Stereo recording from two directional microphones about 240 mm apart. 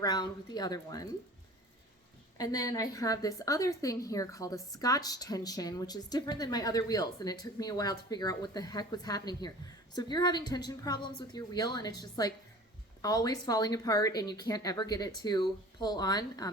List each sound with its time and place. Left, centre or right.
0.0 s a woman's voice: centre
2.4 s a woman's voice: centre